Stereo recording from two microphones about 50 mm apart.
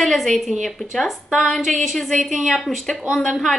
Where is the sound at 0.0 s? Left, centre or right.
Centre.